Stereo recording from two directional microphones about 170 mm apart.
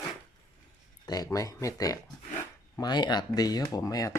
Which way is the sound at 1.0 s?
20° left (ahead or behind).